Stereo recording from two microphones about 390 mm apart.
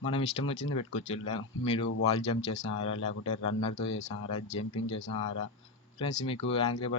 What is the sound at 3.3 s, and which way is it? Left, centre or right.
Speech, left.